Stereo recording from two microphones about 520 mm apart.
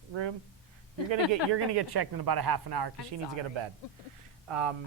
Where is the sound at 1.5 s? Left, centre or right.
Right.